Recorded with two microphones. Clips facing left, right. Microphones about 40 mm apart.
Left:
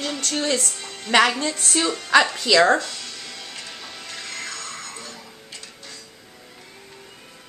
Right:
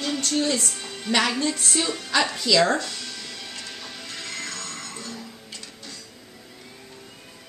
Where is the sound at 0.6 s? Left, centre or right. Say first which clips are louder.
Even; centre.